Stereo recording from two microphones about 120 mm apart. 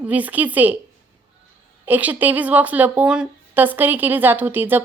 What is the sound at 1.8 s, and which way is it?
Speech, 15° right (ahead or behind).